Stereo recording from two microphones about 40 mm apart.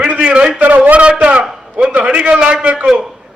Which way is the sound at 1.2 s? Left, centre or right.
Right.